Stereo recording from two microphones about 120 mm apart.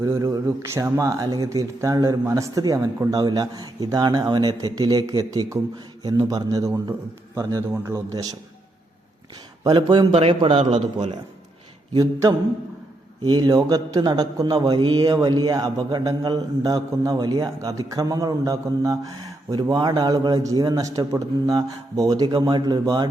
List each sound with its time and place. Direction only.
0.0 s speech: 30° right (ahead or behind)
9.6 s speech: 40° right (ahead or behind)
10.2 s a man's voice: 55° right (ahead or behind)
13.2 s speech: 35° right (ahead or behind)